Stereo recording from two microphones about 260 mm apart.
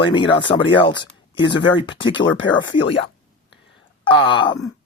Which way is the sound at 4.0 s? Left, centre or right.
Centre.